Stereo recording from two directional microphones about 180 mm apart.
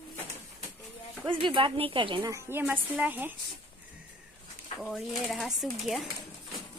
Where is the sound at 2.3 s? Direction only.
15° right (ahead or behind).